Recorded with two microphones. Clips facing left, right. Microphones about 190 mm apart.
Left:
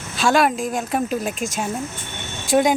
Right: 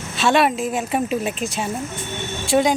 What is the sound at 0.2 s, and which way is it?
Speech, centre (ahead or behind).